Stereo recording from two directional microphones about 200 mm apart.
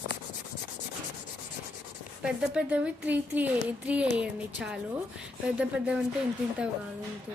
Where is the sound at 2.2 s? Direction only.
5° right (ahead or behind).